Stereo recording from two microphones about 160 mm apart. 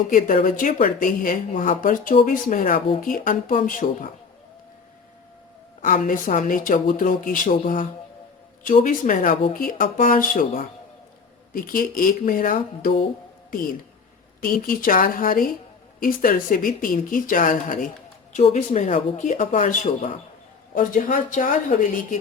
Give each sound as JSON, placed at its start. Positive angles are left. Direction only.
{"t": 0.1, "sound": "speech", "side_deg": 55}
{"t": 5.8, "sound": "speech", "side_deg": 55}
{"t": 14.4, "sound": "speech", "side_deg": 60}